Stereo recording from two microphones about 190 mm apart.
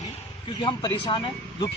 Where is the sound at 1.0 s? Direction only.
25° left (ahead or behind).